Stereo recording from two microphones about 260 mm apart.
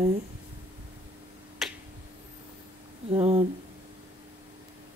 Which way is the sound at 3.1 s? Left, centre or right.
Right.